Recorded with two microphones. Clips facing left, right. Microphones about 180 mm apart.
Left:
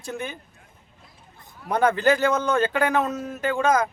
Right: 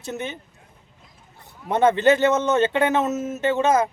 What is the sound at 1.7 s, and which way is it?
Speech, 25° right (ahead or behind).